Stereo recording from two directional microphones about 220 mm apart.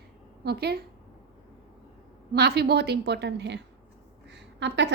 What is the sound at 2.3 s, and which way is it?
A woman's voice, 45° right (ahead or behind).